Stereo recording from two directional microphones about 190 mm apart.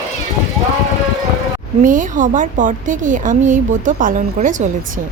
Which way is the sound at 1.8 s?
45° right (ahead or behind).